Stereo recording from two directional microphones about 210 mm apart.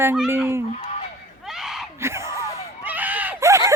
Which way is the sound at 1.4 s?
Centre (ahead or behind).